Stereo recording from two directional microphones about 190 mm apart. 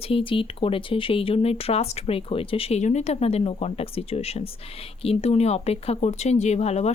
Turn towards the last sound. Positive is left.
turn(degrees=35)  # may be behind; listen again after turning